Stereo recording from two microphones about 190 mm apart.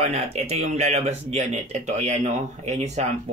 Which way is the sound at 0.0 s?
35° right (ahead or behind).